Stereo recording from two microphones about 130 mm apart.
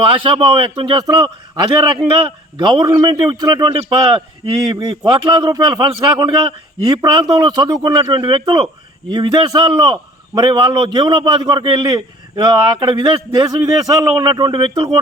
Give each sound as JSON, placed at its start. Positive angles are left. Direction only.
{"t": 0.0, "sound": "speech", "side_deg": -45}
{"t": 1.0, "sound": "a man's voice", "side_deg": -30}